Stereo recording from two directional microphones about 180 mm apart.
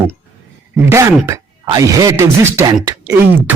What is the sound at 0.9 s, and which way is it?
Speech, 15° right (ahead or behind).